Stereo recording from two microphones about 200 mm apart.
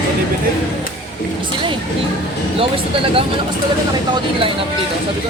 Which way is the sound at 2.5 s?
25° right (ahead or behind).